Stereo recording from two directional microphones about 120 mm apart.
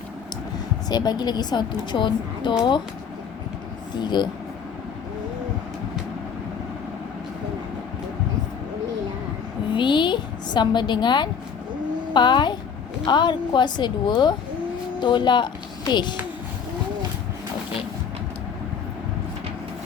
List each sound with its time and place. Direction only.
0.9 s a woman's voice: 35° left (ahead or behind)
3.9 s a woman's voice: 35° left (ahead or behind)
9.7 s a woman's voice: 40° left (ahead or behind)